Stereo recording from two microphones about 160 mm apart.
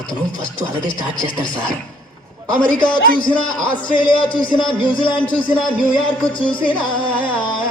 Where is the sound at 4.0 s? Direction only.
30° left (ahead or behind).